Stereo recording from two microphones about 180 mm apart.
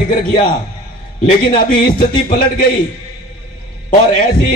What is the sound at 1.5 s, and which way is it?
A man's voice, 50° left (ahead or behind).